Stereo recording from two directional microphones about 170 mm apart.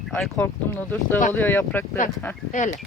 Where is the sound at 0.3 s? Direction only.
10° left (ahead or behind).